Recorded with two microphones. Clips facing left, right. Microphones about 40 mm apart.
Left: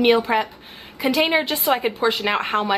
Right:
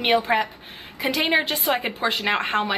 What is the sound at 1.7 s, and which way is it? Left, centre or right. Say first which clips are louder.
Speech: left 4 dB; right.